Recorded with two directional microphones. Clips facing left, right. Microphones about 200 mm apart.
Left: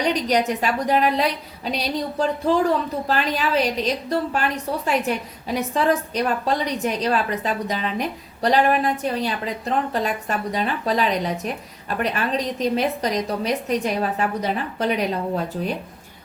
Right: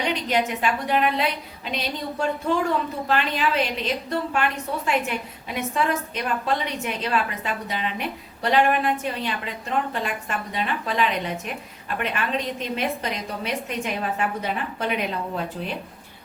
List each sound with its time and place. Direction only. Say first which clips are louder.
0.0 s a woman's voice: left 3 dB; 40° left (ahead or behind)